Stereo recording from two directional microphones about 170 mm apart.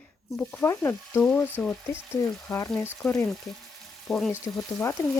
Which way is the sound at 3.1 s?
Centre (ahead or behind).